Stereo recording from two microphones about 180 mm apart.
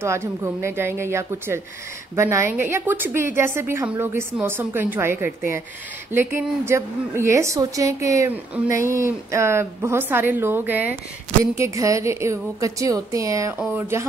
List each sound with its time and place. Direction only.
0.0 s a woman's voice: 15° right (ahead or behind)